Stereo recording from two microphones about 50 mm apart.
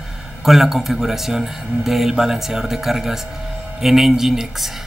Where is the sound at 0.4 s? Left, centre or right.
Centre.